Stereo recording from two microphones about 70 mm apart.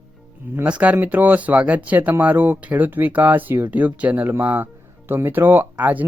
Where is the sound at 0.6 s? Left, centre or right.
Centre.